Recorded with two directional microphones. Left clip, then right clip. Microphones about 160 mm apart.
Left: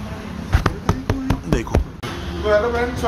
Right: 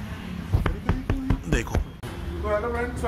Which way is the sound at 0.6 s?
20° left (ahead or behind).